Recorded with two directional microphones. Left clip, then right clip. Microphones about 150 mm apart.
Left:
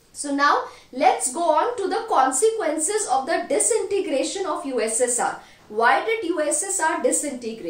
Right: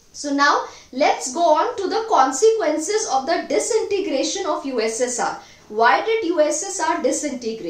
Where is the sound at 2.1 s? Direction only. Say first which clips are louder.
Right 4 dB; 15° right (ahead or behind).